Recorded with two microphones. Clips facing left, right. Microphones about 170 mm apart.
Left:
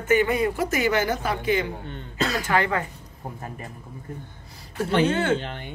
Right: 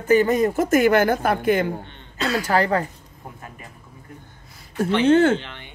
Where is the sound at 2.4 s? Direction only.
35° right (ahead or behind).